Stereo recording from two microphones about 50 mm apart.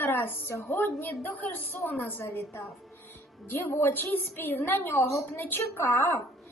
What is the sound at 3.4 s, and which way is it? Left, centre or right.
A woman's voice, left.